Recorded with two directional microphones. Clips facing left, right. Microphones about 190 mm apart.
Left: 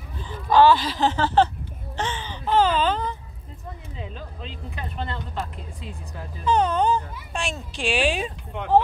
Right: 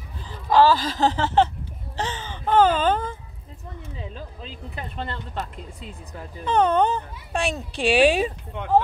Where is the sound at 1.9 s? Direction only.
40° right (ahead or behind).